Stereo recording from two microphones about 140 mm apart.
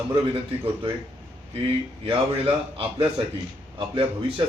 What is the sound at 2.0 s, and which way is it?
A man's voice, 40° right (ahead or behind).